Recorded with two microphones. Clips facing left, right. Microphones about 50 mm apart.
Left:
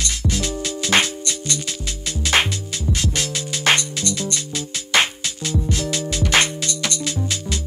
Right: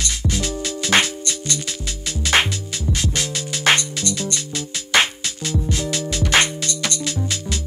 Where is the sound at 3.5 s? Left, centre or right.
Centre.